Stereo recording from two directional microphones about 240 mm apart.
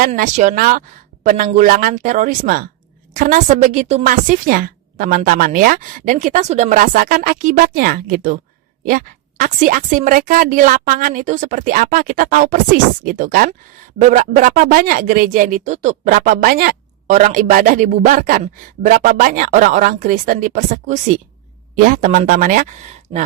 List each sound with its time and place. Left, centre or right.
0.0 s speech: right